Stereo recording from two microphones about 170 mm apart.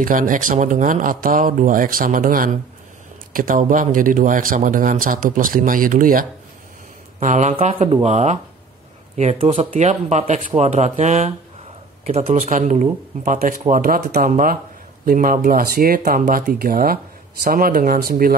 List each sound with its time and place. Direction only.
0.0 s a man's voice: 50° right (ahead or behind)